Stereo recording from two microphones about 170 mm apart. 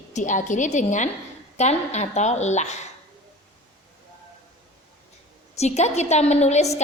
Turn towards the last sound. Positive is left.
turn(degrees=40)  # may be behind; listen again after turning